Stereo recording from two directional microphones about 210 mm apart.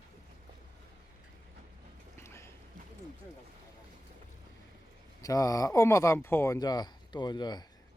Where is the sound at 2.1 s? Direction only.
10° left (ahead or behind).